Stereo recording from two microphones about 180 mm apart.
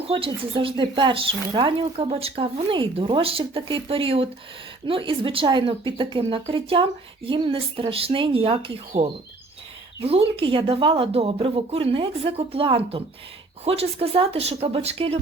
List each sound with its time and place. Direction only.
0.1 s speech: 25° right (ahead or behind)
10.0 s speech: 35° right (ahead or behind)